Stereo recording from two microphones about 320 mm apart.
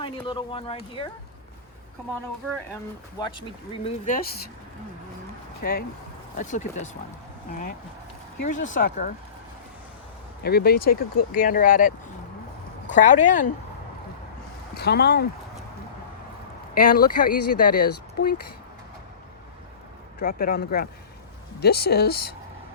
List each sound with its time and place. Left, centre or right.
0.0 s speech: centre
3.2 s speech: centre
5.6 s speech: left
8.4 s speech: left
10.4 s speech: left
14.8 s speech: left
16.7 s speech: left
20.1 s speech: left